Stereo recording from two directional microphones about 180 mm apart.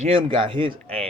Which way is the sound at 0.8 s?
5° left (ahead or behind).